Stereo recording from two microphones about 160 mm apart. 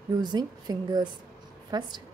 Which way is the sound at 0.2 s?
25° right (ahead or behind).